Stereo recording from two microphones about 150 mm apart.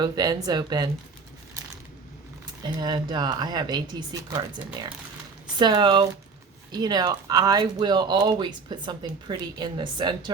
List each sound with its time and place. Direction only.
0.0 s speech: 25° right (ahead or behind)
2.6 s speech: 30° right (ahead or behind)